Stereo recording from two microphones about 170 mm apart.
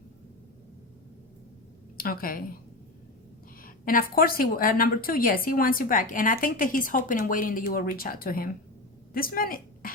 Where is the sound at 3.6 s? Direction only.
55° left (ahead or behind).